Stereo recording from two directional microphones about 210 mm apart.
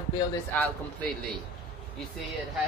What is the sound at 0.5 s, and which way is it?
Speech, 5° left (ahead or behind).